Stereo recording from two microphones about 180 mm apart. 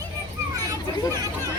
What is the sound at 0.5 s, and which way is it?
Children playing, 20° right (ahead or behind).